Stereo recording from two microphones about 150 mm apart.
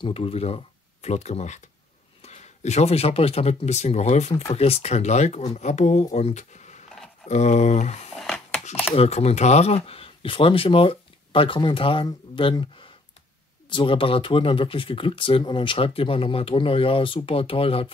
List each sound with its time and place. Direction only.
0.0 s speech: 40° left (ahead or behind)
8.2 s a sound: centre (ahead or behind)
8.9 s speech: 45° left (ahead or behind)